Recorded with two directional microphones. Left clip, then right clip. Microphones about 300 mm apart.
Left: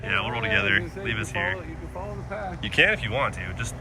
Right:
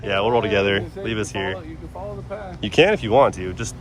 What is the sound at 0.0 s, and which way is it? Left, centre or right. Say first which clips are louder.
Speech: right 7 dB; centre.